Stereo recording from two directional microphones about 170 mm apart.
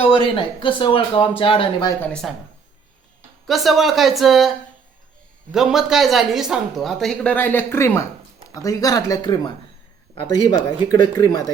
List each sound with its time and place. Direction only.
0.0 s speech: 30° left (ahead or behind)
2.2 s speech: centre (ahead or behind)
3.4 s speech: centre (ahead or behind); by 9.5 s 25° left (ahead or behind)
10.5 s speech: 25° left (ahead or behind)